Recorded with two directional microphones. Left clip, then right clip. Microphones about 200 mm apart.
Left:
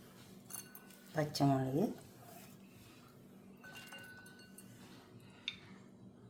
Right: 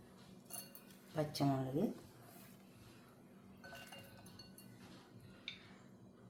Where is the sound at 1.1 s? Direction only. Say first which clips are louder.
Left 4 dB; 25° left (ahead or behind).